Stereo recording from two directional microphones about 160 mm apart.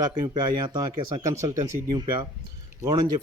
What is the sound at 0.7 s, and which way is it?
Speech, 25° right (ahead or behind).